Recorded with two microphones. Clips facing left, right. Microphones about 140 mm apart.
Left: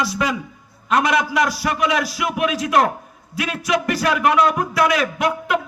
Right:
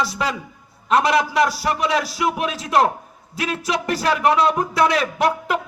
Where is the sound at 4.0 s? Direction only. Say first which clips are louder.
Right 1 dB; 30° right (ahead or behind).